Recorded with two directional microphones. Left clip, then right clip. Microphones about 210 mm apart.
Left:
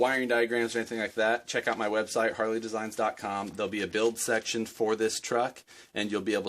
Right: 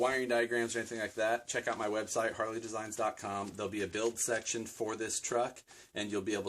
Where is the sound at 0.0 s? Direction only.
40° left (ahead or behind).